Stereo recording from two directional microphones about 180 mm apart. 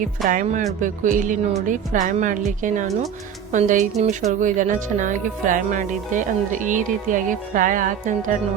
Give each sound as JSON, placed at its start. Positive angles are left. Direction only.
{"t": 0.3, "sound": "speech", "side_deg": -45}